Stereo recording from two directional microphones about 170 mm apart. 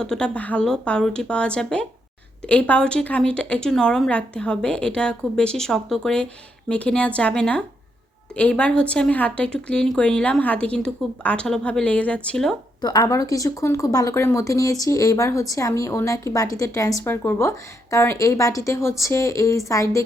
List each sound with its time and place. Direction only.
0.0 s a woman's voice: 5° left (ahead or behind)
12.8 s speech: 25° left (ahead or behind)